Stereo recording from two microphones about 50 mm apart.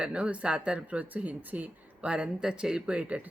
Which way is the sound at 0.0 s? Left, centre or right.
Right.